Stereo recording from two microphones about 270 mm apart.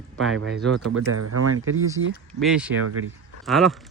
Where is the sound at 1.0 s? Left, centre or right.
Right.